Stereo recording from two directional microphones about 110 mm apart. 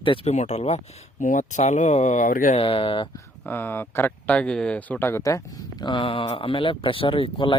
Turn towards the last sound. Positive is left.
turn(degrees=50)  # may be behind; listen again after turning